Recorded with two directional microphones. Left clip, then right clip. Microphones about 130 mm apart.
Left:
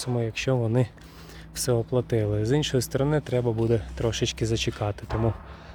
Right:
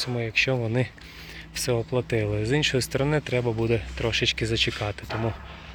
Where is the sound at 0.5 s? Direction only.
40° left (ahead or behind).